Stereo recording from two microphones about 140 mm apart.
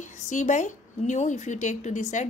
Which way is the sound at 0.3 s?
60° left (ahead or behind).